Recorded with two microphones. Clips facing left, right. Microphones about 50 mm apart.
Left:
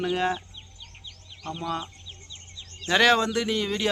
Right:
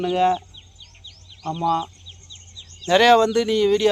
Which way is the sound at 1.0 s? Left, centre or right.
Centre.